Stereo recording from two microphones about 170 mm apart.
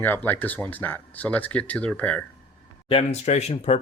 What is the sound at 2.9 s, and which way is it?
Speech, 35° left (ahead or behind).